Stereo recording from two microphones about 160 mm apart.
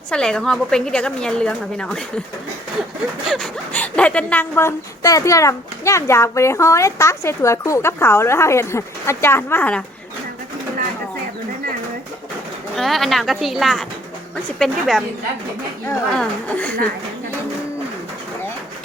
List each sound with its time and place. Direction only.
0.1 s a woman's voice: 5° left (ahead or behind)
3.2 s speech: 5° left (ahead or behind)
12.7 s a woman's voice: centre (ahead or behind)